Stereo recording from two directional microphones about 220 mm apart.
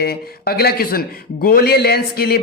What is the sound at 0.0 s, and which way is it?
A man's voice, 45° left (ahead or behind).